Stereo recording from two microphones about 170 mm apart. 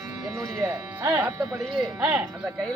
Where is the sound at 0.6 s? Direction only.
10° right (ahead or behind).